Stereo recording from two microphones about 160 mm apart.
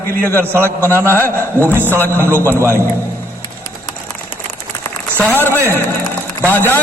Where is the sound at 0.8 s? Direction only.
15° right (ahead or behind).